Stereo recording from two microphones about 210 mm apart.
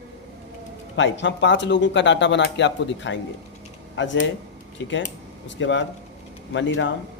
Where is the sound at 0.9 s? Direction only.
60° left (ahead or behind).